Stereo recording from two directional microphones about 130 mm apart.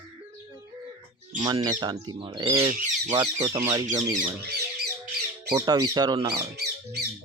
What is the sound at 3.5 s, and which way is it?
Speech, 25° right (ahead or behind).